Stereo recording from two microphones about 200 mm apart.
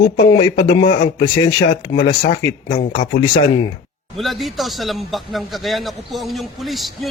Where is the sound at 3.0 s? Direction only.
25° left (ahead or behind).